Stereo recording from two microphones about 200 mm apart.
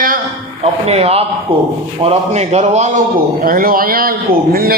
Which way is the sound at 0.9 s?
30° right (ahead or behind).